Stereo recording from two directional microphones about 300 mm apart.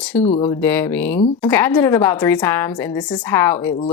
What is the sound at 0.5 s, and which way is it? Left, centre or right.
Speech, centre.